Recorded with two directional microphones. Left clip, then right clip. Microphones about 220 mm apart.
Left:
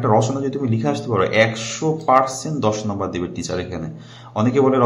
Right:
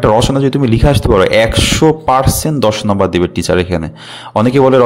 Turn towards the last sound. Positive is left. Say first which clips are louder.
# right 8 dB
turn(degrees=-45)  # may be behind; listen again after turning